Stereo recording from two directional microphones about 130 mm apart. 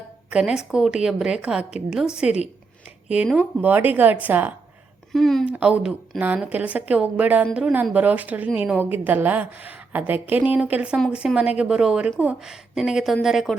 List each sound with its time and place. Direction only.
0.3 s a woman's voice: 5° right (ahead or behind)
5.1 s a woman's voice: centre (ahead or behind)
5.5 s a woman's voice: 10° right (ahead or behind)